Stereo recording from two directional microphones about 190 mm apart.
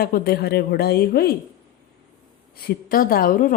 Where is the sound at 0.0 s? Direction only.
55° left (ahead or behind).